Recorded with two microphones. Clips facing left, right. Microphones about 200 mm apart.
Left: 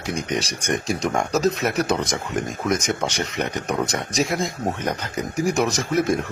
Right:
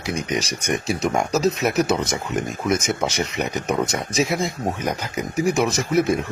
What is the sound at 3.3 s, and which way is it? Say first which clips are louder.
Speech: right 1 dB; centre (ahead or behind).